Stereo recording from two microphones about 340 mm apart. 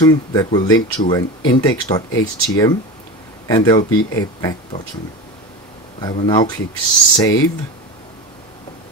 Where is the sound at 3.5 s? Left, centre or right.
Centre.